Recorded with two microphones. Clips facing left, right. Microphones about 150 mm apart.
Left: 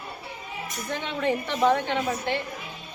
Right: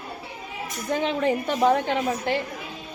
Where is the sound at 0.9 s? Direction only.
40° right (ahead or behind).